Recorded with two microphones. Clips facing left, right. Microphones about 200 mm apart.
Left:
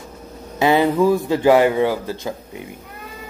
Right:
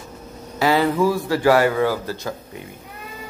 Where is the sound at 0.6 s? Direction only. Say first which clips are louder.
Left 2 dB; 20° left (ahead or behind).